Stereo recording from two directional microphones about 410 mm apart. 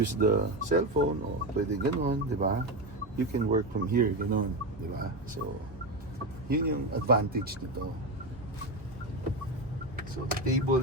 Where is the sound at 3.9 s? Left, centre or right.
Right.